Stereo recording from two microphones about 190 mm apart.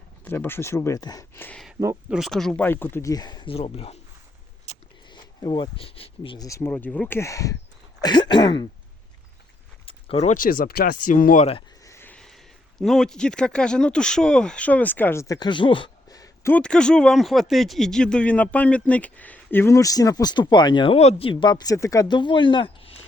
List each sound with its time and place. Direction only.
0.3 s speech: 10° left (ahead or behind)
1.8 s speech: 15° right (ahead or behind)
2.1 s speech: centre (ahead or behind); by 7.5 s 15° left (ahead or behind)
8.0 s throat clearing: 25° left (ahead or behind)
9.8 s speech: 30° left (ahead or behind)
11.8 s a sound: 15° left (ahead or behind)
12.8 s speech: centre (ahead or behind); by 23.0 s 30° left (ahead or behind)